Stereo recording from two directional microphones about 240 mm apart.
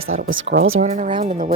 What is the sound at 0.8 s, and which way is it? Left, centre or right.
Speech, right.